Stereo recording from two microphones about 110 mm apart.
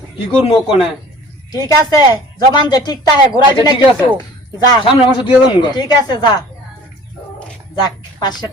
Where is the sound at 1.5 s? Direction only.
35° left (ahead or behind).